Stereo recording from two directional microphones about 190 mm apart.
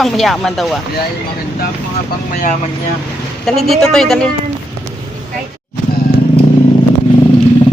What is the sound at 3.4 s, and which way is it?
Speech, centre (ahead or behind).